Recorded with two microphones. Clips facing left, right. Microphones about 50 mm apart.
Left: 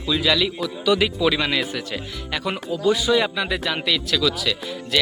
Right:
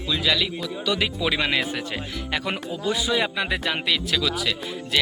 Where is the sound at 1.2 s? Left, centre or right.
Right.